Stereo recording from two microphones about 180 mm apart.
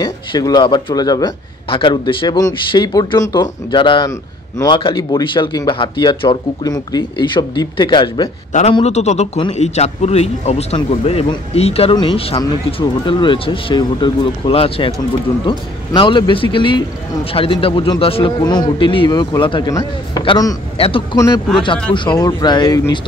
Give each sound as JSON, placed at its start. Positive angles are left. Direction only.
{"t": 0.0, "sound": "a man's voice", "side_deg": 25}
{"t": 8.7, "sound": "a man's voice", "side_deg": 35}
{"t": 20.7, "sound": "a man's voice", "side_deg": 30}
{"t": 22.2, "sound": "a man's voice", "side_deg": 25}